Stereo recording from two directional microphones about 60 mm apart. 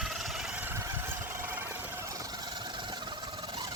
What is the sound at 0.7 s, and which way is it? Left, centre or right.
Vehicle, right.